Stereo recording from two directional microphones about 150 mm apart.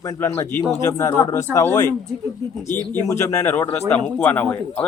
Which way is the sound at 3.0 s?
20° left (ahead or behind).